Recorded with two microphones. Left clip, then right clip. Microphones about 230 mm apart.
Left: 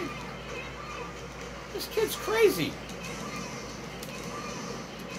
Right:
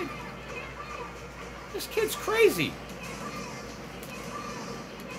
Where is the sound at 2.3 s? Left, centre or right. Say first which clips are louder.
Right 1 dB; right.